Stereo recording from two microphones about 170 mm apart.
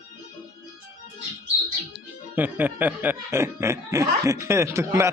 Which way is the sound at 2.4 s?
10° right (ahead or behind).